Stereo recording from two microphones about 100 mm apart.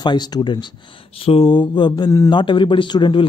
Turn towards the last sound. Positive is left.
turn(degrees=55)  # may be behind; listen again after turning